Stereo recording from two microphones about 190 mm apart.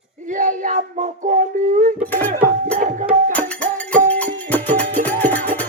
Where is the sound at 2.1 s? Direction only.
10° left (ahead or behind).